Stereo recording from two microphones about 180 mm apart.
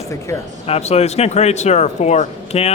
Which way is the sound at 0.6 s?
35° left (ahead or behind).